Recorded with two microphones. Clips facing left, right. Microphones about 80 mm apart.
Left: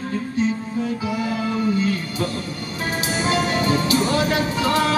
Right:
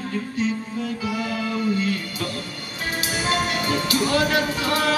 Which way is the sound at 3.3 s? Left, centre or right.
Left.